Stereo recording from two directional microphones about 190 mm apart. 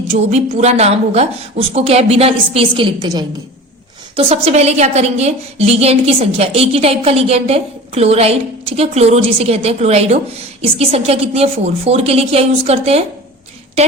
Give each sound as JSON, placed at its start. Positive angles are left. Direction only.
{"t": 0.1, "sound": "a woman's voice", "side_deg": -35}